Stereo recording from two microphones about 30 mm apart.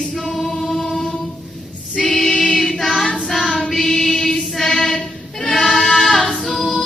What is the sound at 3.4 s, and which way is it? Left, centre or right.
Choir, left.